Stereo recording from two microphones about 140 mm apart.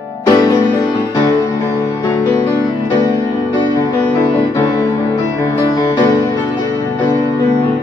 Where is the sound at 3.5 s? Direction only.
30° left (ahead or behind).